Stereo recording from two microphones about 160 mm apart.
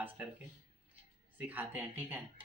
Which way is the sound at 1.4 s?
10° right (ahead or behind).